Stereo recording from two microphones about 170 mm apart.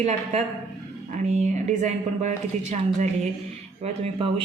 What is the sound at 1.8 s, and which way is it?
Speech, 45° right (ahead or behind).